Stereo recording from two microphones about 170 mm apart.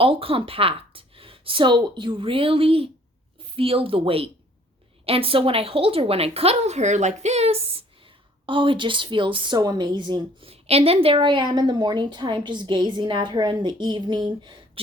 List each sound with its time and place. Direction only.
0.0 s a woman's voice: 35° right (ahead or behind)